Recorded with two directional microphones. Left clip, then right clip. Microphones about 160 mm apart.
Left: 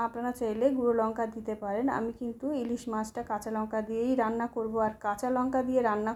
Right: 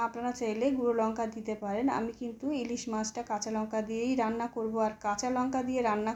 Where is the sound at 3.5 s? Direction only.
25° left (ahead or behind).